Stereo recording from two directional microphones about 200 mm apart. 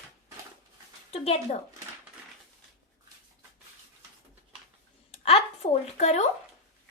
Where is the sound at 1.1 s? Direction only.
30° left (ahead or behind).